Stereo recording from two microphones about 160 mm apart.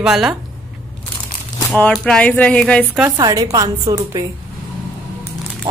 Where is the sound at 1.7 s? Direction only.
5° left (ahead or behind).